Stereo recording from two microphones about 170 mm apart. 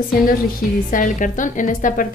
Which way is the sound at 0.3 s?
55° left (ahead or behind).